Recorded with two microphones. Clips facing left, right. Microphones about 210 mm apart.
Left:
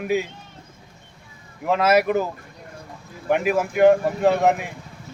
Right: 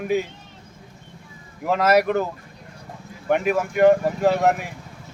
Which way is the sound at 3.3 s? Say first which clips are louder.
Even; centre (ahead or behind).